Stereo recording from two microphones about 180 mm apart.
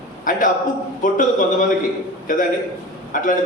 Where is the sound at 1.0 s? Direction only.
45° left (ahead or behind).